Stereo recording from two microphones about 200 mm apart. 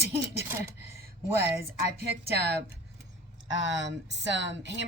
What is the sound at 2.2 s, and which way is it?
Speech, 55° right (ahead or behind).